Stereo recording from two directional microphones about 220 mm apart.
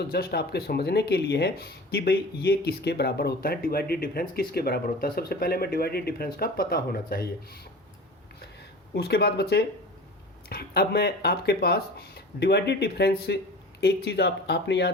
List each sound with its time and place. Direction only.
0.1 s speech: 45° left (ahead or behind)
9.0 s speech: 45° left (ahead or behind)